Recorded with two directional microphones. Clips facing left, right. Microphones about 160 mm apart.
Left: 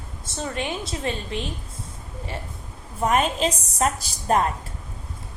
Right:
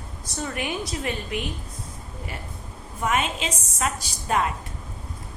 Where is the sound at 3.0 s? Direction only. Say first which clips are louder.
Left 4 dB; 35° left (ahead or behind).